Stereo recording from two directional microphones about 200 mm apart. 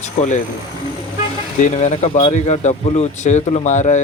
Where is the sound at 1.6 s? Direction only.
35° left (ahead or behind).